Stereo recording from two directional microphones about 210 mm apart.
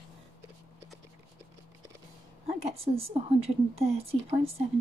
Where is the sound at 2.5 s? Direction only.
30° right (ahead or behind).